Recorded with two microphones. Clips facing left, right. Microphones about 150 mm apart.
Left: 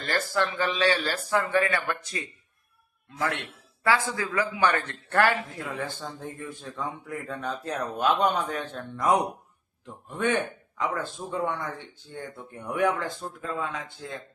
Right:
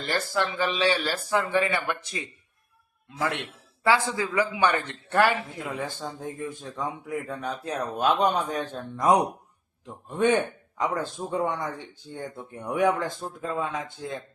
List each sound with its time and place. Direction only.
0.0 s a man's voice: 15° right (ahead or behind)
12.6 s a man's voice: 20° right (ahead or behind)